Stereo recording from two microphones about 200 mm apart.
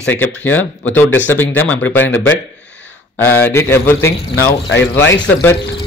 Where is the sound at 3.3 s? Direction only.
10° left (ahead or behind).